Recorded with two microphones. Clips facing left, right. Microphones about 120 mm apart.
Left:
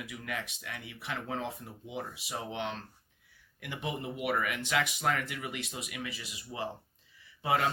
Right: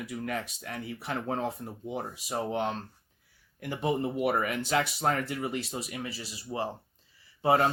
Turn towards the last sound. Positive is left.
turn(degrees=-40)  # may be behind; listen again after turning